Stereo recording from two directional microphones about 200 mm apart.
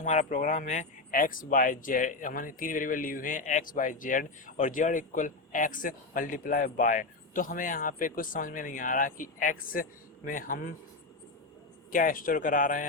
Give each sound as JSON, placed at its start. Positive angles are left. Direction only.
{"t": 0.0, "sound": "speech", "side_deg": 35}
{"t": 11.9, "sound": "speech", "side_deg": 40}